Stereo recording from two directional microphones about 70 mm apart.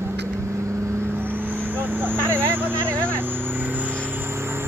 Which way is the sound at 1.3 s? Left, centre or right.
Right.